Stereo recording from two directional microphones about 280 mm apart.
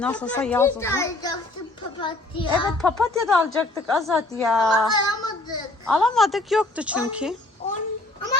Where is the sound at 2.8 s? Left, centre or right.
Centre.